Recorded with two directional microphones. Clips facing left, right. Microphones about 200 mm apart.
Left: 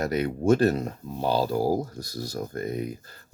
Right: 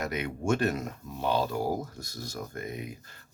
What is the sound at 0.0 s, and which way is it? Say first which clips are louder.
Speech: left 7 dB; 35° left (ahead or behind).